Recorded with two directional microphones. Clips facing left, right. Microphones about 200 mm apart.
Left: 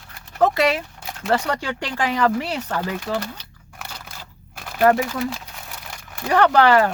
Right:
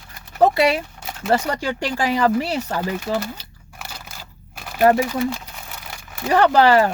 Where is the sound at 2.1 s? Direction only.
5° right (ahead or behind).